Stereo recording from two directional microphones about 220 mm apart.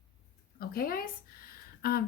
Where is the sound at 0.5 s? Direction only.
40° left (ahead or behind).